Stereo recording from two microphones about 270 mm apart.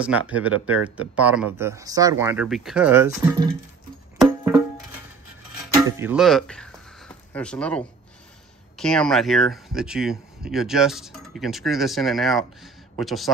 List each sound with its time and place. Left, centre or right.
0.5 s speech: right
0.8 s speech: centre
4.2 s music: centre
5.8 s a sound: centre
8.7 s speech: centre